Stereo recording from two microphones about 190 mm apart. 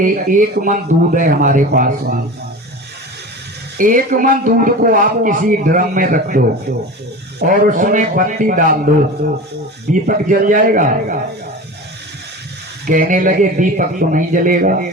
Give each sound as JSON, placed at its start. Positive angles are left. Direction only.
{"t": 0.0, "sound": "a man's voice", "side_deg": -45}
{"t": 3.8, "sound": "a man's voice", "side_deg": -45}
{"t": 9.9, "sound": "a man's voice", "side_deg": -45}
{"t": 12.8, "sound": "a man's voice", "side_deg": -45}